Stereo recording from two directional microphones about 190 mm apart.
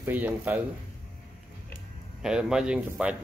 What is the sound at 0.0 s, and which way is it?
Speech, 10° right (ahead or behind).